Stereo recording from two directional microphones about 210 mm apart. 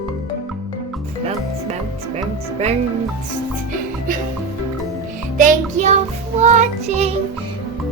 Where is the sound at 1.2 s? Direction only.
30° right (ahead or behind).